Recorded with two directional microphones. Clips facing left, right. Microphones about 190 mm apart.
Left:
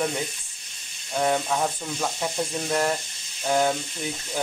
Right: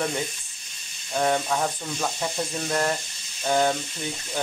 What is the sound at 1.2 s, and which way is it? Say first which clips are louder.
Speech: even; 5° left (ahead or behind).